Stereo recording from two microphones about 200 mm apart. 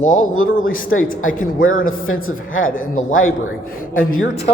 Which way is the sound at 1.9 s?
90° left.